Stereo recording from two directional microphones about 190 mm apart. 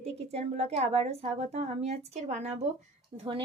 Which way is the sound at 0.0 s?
30° right (ahead or behind).